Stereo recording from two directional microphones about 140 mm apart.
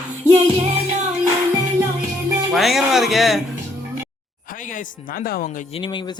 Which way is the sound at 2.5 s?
Centre (ahead or behind).